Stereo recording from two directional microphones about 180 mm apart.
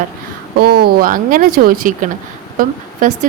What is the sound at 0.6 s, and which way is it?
A woman's voice, 60° right (ahead or behind).